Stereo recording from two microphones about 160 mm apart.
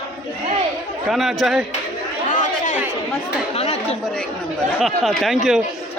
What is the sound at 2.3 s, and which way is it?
Chatter, 50° left (ahead or behind).